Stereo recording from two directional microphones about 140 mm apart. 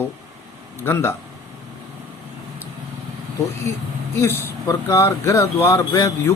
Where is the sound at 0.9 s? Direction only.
15° left (ahead or behind).